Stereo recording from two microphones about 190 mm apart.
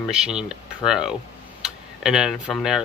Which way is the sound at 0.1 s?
5° right (ahead or behind).